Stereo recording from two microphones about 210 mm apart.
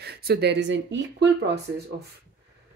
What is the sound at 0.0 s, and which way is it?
Speech, 50° right (ahead or behind).